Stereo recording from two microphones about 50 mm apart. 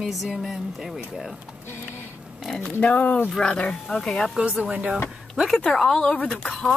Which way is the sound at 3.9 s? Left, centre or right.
Centre.